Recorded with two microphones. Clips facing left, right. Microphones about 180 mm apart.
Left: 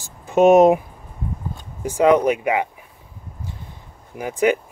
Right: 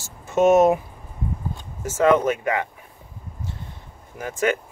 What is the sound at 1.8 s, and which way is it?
Speech, 15° left (ahead or behind).